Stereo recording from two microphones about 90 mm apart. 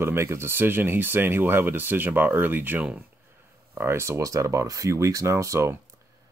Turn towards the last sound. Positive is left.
turn(degrees=-35)  # may be behind; listen again after turning